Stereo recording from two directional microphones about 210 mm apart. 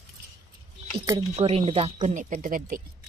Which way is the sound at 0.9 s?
20° right (ahead or behind).